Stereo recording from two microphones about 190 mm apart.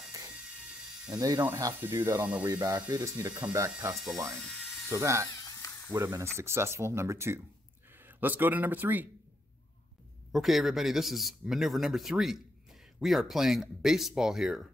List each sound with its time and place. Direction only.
1.1 s speech: 20° right (ahead or behind)
2.5 s speech: 20° right (ahead or behind)
10.3 s speech: centre (ahead or behind)